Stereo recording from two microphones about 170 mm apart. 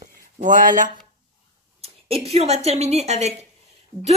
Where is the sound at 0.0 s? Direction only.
50° right (ahead or behind).